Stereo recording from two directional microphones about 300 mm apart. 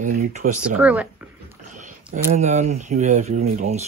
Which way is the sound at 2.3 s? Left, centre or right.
Right.